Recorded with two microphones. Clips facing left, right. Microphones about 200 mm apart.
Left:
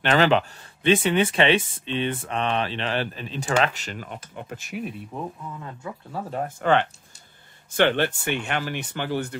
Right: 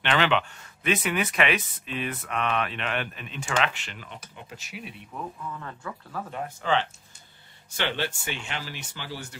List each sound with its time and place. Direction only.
0.0 s speech: 40° left (ahead or behind)
5.1 s speech: 25° left (ahead or behind)
6.3 s speech: 50° left (ahead or behind)